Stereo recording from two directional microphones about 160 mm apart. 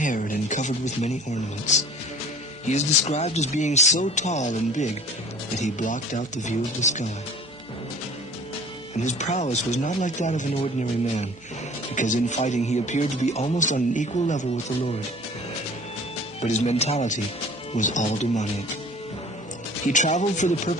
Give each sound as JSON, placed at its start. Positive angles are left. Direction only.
{"t": 0.0, "sound": "speech", "side_deg": 55}
{"t": 2.6, "sound": "a man's voice", "side_deg": 45}
{"t": 9.0, "sound": "a man's voice", "side_deg": 45}
{"t": 16.4, "sound": "a man's voice", "side_deg": 45}
{"t": 19.9, "sound": "a man's voice", "side_deg": 50}